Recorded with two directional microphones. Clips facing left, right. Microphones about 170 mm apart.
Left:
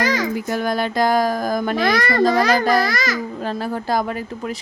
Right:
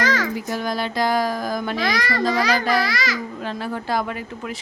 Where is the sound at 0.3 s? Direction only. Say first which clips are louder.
Left 4 dB; 55° left (ahead or behind).